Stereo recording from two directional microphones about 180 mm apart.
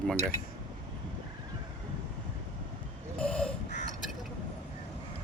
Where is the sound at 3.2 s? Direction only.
5° left (ahead or behind).